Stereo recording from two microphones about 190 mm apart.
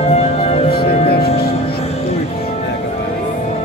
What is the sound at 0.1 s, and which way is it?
Music, 35° left (ahead or behind).